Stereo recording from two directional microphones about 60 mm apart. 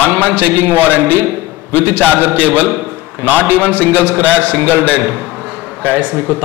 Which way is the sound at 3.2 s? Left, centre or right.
Right.